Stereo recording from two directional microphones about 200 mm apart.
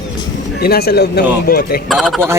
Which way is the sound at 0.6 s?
50° left (ahead or behind).